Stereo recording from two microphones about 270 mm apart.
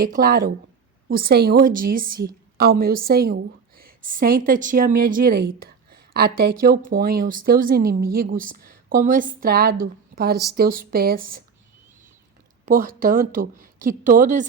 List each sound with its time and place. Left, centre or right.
0.0 s a woman's voice: right
12.6 s a woman's voice: right